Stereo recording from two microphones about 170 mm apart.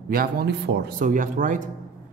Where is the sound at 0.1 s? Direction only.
60° right (ahead or behind).